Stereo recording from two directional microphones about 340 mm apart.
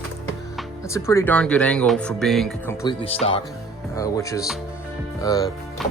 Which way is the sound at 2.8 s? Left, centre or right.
Centre.